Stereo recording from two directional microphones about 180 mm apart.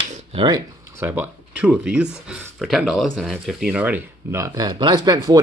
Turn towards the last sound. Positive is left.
turn(degrees=-20)  # may be behind; listen again after turning